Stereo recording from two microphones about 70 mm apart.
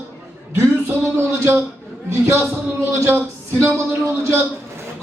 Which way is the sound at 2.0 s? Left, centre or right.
Right.